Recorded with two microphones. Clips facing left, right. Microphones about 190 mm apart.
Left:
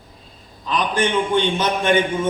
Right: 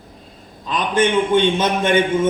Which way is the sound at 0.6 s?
20° right (ahead or behind).